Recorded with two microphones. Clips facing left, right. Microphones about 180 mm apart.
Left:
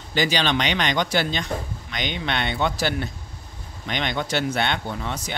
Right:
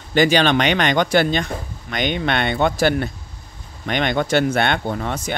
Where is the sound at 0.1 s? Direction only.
55° right (ahead or behind).